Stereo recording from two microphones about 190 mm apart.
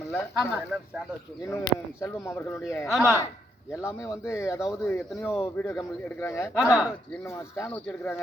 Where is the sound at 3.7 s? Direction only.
15° left (ahead or behind).